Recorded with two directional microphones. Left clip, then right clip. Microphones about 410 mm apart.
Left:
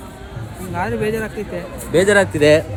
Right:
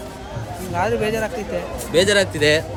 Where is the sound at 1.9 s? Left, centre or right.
Centre.